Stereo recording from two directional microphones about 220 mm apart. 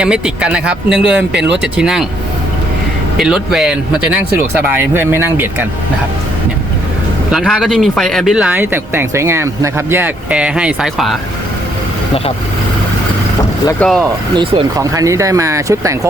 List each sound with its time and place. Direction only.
0.0 s speech: 5° right (ahead or behind)
1.3 s speech: 50° right (ahead or behind)
1.6 s speech: 5° right (ahead or behind)
3.2 s speech: 5° right (ahead or behind)
4.8 s speech: 10° right (ahead or behind)
7.3 s speech: centre (ahead or behind)
13.7 s speech: 5° left (ahead or behind)
14.3 s speech: 20° right (ahead or behind)